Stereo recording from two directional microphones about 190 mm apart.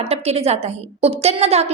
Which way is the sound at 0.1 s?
35° right (ahead or behind).